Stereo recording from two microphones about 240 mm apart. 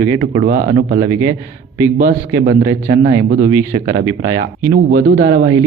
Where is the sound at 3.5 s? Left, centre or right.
Centre.